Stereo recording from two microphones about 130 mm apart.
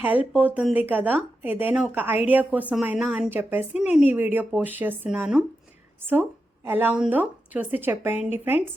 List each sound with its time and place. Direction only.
0.0 s speech: 15° right (ahead or behind)